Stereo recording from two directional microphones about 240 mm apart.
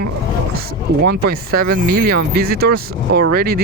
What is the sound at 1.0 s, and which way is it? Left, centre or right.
Speech, right.